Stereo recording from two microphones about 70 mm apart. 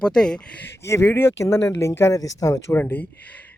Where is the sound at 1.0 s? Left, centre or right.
Left.